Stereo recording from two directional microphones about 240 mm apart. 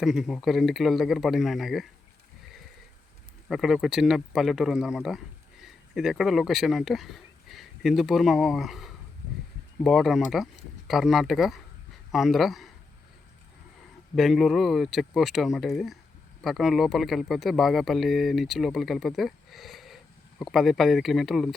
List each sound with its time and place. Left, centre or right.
0.0 s speech: centre
3.5 s speech: centre
14.2 s speech: centre